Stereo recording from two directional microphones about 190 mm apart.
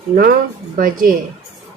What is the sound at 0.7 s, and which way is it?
Speech, 45° right (ahead or behind).